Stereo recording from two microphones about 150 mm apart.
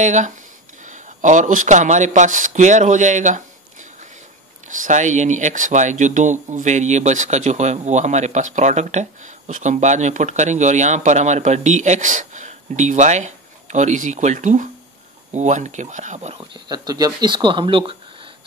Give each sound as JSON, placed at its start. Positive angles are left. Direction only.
{"t": 0.0, "sound": "speech", "side_deg": -55}
{"t": 4.6, "sound": "speech", "side_deg": -60}
{"t": 16.3, "sound": "speech", "side_deg": -25}